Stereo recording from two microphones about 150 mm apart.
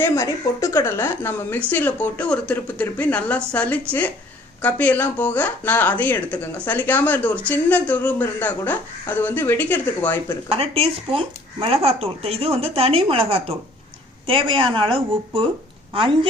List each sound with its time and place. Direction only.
0.0 s a woman's voice: 20° left (ahead or behind)
10.5 s speech: 40° right (ahead or behind)